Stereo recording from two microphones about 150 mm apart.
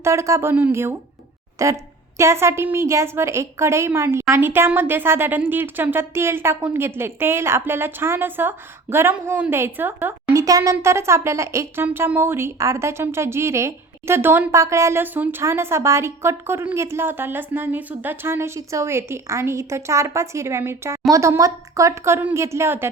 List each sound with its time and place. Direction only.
0.0 s a woman's voice: 20° right (ahead or behind)